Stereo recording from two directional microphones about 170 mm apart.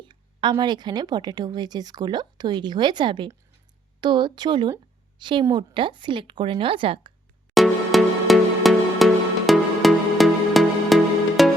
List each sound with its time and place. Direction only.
0.0 s speech: 25° right (ahead or behind)
7.5 s music: centre (ahead or behind)